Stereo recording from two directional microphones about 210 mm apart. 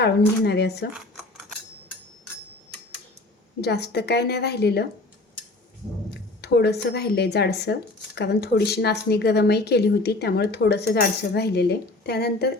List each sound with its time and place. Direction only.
0.0 s speech: 50° left (ahead or behind)
3.6 s speech: 50° left (ahead or behind)
6.4 s speech: 50° left (ahead or behind)